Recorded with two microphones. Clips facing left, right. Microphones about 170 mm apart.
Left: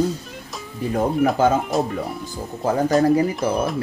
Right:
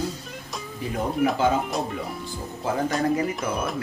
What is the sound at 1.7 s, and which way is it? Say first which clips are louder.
Speech: left 6 dB; centre (ahead or behind).